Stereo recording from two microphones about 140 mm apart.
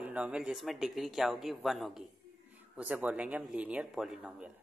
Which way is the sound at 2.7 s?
10° right (ahead or behind).